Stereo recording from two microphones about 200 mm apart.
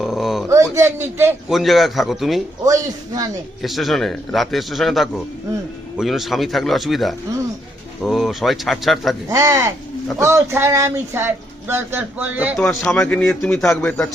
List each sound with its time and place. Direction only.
0.0 s dog: centre (ahead or behind)
0.4 s a man's voice: 15° right (ahead or behind)
1.5 s a man's voice: centre (ahead or behind)
2.6 s a man's voice: 15° right (ahead or behind)
3.6 s a man's voice: centre (ahead or behind)
9.3 s a man's voice: 15° right (ahead or behind)
12.5 s a man's voice: 5° left (ahead or behind)